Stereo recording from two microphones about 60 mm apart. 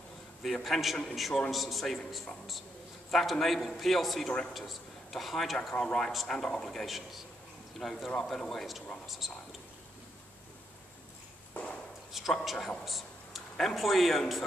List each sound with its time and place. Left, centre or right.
0.4 s a man's voice: centre
11.6 s a sound: left
12.1 s a man's voice: centre